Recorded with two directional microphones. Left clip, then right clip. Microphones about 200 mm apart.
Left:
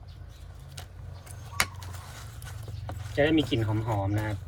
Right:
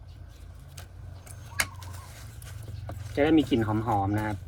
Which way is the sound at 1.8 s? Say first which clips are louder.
Left 2 dB; centre (ahead or behind).